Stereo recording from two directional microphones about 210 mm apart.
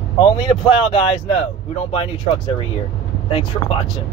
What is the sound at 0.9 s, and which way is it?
Speech, 25° left (ahead or behind).